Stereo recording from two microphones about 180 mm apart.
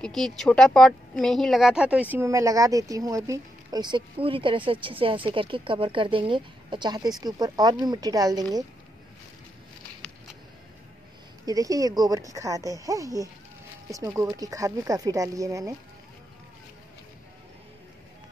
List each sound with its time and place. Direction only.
0.0 s speech: centre (ahead or behind); by 8.6 s 20° right (ahead or behind)
11.4 s speech: 20° right (ahead or behind)